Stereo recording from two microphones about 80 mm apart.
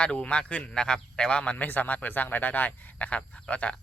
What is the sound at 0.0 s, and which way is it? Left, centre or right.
A man's voice, centre.